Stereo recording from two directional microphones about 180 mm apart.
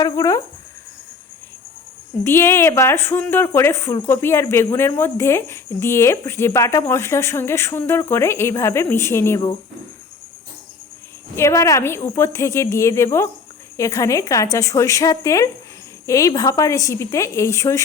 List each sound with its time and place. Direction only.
0.0 s speech: 20° left (ahead or behind)
2.2 s speech: 15° left (ahead or behind)
11.3 s speech: 15° left (ahead or behind)